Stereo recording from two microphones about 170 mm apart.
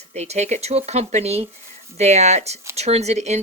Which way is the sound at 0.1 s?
40° right (ahead or behind).